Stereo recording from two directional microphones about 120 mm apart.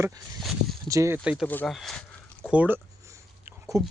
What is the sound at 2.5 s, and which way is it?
Speech, 10° right (ahead or behind).